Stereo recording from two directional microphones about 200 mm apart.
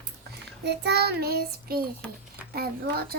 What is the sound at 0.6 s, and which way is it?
Child singing, 55° right (ahead or behind).